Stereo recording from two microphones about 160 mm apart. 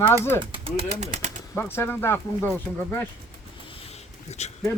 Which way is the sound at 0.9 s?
45° right (ahead or behind).